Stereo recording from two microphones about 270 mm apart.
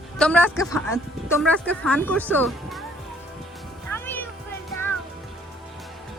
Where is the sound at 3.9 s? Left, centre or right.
Centre.